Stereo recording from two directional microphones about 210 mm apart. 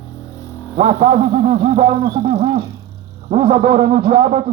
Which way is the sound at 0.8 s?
35° right (ahead or behind).